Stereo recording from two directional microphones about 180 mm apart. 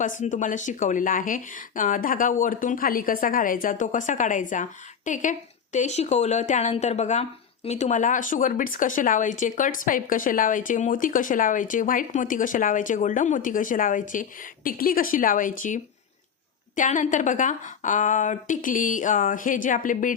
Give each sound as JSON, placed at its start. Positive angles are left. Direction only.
{"t": 0.0, "sound": "speech", "side_deg": 45}